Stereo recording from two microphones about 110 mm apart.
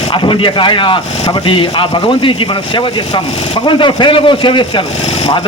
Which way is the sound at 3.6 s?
50° left (ahead or behind).